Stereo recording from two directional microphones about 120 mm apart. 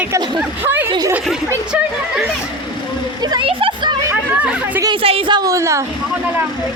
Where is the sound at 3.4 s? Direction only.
45° right (ahead or behind).